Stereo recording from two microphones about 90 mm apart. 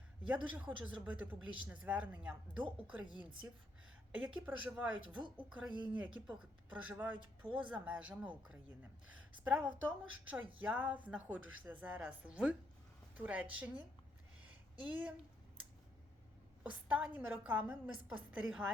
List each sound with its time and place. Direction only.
0.3 s a woman's voice: 15° right (ahead or behind)
4.1 s a woman's voice: 15° right (ahead or behind)
14.8 s a woman's voice: 15° right (ahead or behind)
16.6 s a woman's voice: 15° right (ahead or behind)